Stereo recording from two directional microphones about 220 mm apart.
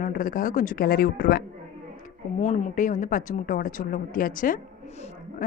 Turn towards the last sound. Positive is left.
turn(degrees=30)  # may be behind; listen again after turning